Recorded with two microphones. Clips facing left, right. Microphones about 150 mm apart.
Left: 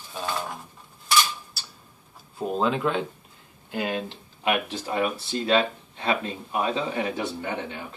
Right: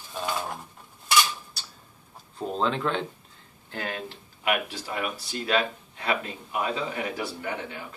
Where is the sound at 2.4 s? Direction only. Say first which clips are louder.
Left 2 dB; 10° left (ahead or behind).